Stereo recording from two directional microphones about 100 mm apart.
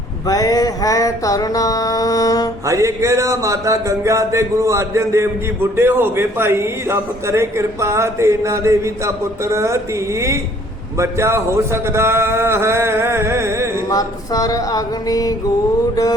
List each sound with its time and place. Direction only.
0.3 s mantra: 40° left (ahead or behind)
2.6 s a sound: 30° right (ahead or behind)
5.7 s a man's voice: 25° right (ahead or behind)
13.9 s mantra: 40° left (ahead or behind)